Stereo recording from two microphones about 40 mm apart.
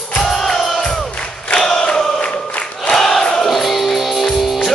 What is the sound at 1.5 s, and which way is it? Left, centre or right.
Chant, centre.